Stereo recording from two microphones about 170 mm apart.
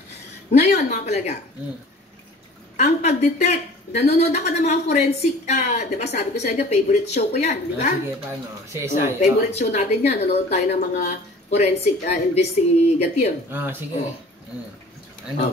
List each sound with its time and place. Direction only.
0.5 s a woman's voice: 40° left (ahead or behind)
2.8 s a woman's voice: 40° left (ahead or behind)
8.7 s speech: 15° right (ahead or behind)
9.2 s a woman's voice: 40° left (ahead or behind)
13.5 s speech: 10° right (ahead or behind)